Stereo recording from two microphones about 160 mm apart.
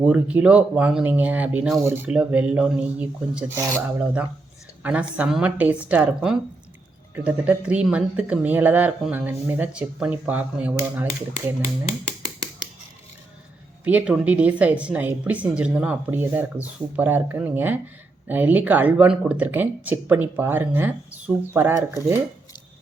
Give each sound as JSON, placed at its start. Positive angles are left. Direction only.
{"t": 0.0, "sound": "a woman's voice", "side_deg": -10}
{"t": 11.6, "sound": "speech", "side_deg": -20}
{"t": 13.8, "sound": "a woman's voice", "side_deg": -10}